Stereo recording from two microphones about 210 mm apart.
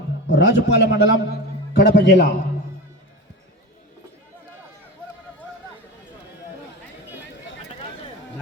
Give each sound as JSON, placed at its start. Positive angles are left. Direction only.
{"t": 0.3, "sound": "a man's voice", "side_deg": 60}